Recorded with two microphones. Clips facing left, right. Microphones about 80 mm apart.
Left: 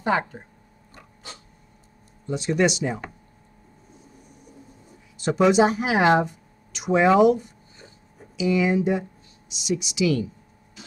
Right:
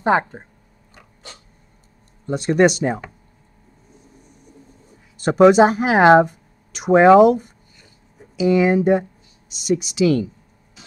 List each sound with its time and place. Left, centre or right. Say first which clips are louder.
0.0 s speech: right 6 dB; right
2.2 s speech: right 6 dB; right
5.1 s speech: right 7 dB; right